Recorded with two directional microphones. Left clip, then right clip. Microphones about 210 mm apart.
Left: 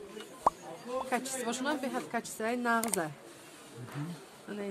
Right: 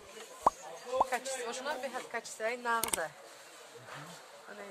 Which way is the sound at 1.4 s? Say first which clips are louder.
Left 3 dB; 35° left (ahead or behind).